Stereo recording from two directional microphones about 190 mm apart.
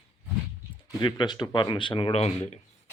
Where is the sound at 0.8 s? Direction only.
25° left (ahead or behind).